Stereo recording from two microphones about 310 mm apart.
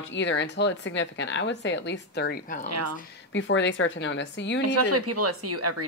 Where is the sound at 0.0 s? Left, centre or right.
Left.